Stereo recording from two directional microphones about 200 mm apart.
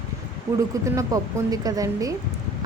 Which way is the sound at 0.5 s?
15° right (ahead or behind).